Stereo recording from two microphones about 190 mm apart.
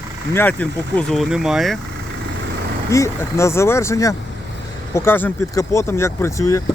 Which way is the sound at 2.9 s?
15° left (ahead or behind).